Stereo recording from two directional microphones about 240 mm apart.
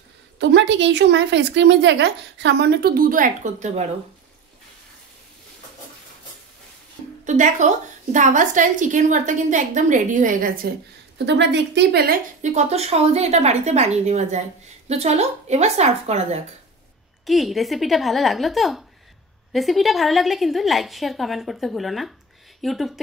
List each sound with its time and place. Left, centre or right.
0.4 s a woman's voice: right
7.2 s a woman's voice: right
11.2 s speech: right
17.3 s a woman's voice: centre